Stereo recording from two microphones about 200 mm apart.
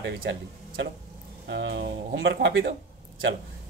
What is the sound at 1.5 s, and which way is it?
Speech, 55° right (ahead or behind).